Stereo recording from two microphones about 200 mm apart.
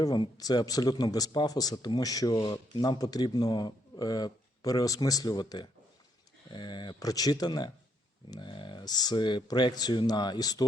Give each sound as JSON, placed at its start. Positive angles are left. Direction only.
{"t": 0.0, "sound": "speech", "side_deg": 20}